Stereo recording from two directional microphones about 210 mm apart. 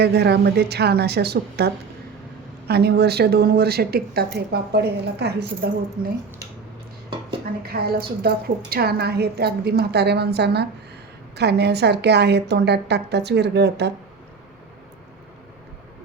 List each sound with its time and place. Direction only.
0.0 s speech: 50° right (ahead or behind)
7.6 s speech: 45° right (ahead or behind)